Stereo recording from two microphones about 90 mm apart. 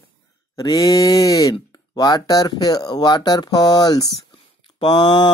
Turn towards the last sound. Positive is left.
turn(degrees=55)  # may be behind; listen again after turning